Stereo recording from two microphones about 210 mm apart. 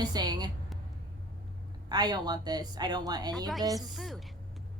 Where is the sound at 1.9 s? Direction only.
20° right (ahead or behind).